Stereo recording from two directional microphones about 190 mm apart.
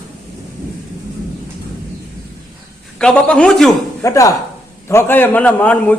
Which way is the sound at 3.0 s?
5° left (ahead or behind).